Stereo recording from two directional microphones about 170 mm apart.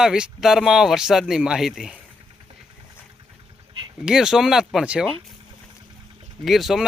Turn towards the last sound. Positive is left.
turn(degrees=0)  # may be behind; listen again after turning